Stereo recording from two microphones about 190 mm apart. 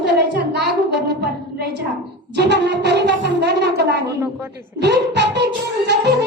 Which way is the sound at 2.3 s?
60° right (ahead or behind).